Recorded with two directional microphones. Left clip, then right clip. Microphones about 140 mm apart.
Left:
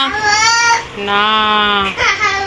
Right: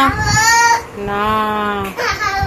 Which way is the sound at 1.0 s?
10° right (ahead or behind).